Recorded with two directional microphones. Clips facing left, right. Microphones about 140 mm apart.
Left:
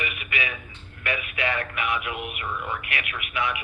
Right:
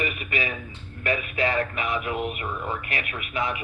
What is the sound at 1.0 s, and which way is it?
A man's voice, 35° right (ahead or behind).